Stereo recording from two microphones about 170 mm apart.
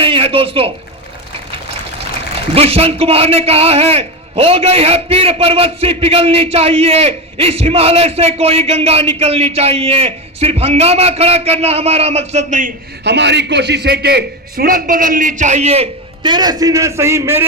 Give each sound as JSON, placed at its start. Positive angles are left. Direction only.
{"t": 0.0, "sound": "speech", "side_deg": -35}
{"t": 2.6, "sound": "a man's voice", "side_deg": -35}
{"t": 13.1, "sound": "a man's voice", "side_deg": -90}